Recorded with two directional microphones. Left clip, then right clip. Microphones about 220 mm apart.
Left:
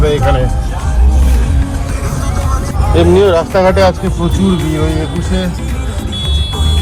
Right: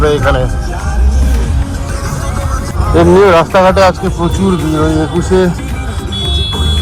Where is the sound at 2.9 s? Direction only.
15° right (ahead or behind).